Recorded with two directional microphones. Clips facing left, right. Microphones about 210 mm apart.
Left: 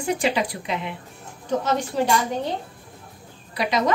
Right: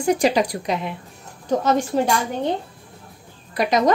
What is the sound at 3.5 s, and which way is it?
Speech, 45° right (ahead or behind).